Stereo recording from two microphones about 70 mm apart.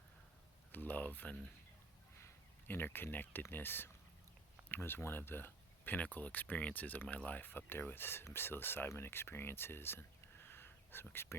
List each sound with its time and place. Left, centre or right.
0.7 s speech: left
2.6 s speech: left